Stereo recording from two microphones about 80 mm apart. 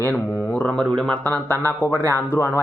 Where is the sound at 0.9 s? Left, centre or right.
Centre.